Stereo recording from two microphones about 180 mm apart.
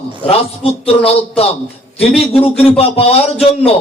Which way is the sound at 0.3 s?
35° left (ahead or behind).